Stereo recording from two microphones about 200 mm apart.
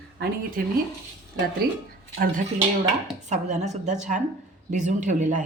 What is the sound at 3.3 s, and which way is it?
Speech, 35° right (ahead or behind).